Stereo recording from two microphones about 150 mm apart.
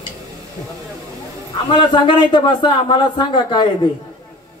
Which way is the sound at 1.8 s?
30° left (ahead or behind).